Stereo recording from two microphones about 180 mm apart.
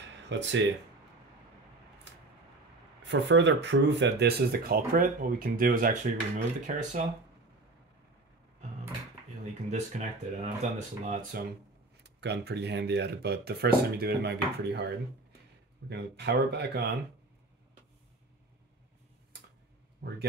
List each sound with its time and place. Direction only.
0.3 s speech: 85° right
3.0 s speech: 80° right; by 7.1 s 45° right (ahead or behind)
9.7 s speech: 40° right (ahead or behind)
12.0 s speech: 70° right (ahead or behind)
20.0 s speech: 65° right (ahead or behind)